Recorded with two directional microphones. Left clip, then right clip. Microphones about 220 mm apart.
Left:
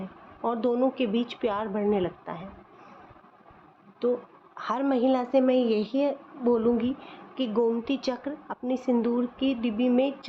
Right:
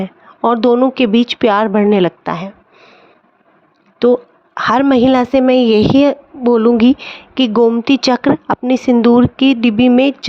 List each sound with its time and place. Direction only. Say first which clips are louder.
0.4 s a woman's voice: right 14 dB; 50° right (ahead or behind)
4.0 s a woman's voice: right 16 dB; 50° right (ahead or behind)